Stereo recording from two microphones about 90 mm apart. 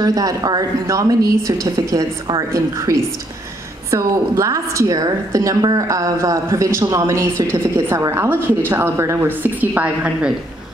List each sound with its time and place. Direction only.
0.0 s a woman's voice: 40° right (ahead or behind); by 10.3 s 15° right (ahead or behind)